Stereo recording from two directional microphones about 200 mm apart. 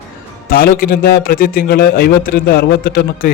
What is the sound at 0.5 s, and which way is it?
Speech, 45° left (ahead or behind).